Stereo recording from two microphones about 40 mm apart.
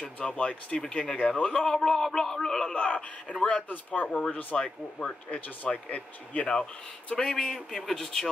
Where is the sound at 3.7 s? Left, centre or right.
Left.